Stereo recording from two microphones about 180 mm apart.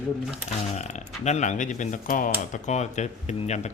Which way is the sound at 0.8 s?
40° left (ahead or behind).